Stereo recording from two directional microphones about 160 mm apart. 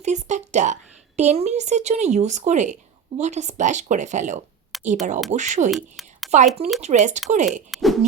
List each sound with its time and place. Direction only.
0.0 s a woman's voice: 45° right (ahead or behind)
4.7 s a sound: centre (ahead or behind)
5.3 s a woman's voice: 50° right (ahead or behind)
5.7 s a sound: centre (ahead or behind)
6.3 s a woman's voice: 45° right (ahead or behind)
7.7 s hoot: centre (ahead or behind)